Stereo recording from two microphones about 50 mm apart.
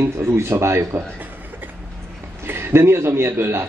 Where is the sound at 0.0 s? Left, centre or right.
Right.